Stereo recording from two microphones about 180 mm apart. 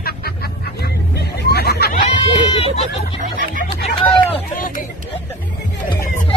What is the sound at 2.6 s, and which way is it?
Speech, 35° left (ahead or behind).